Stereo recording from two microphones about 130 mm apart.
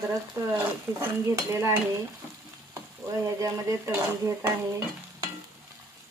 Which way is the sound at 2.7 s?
25° right (ahead or behind).